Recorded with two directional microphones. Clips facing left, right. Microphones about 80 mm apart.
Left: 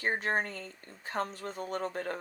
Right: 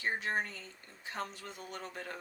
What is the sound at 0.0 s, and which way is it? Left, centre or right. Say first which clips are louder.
Speech: left 4 dB; left.